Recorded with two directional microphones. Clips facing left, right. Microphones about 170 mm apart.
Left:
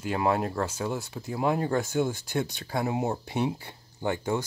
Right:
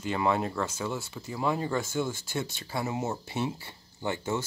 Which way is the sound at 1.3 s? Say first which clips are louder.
Left 3 dB; 55° left (ahead or behind).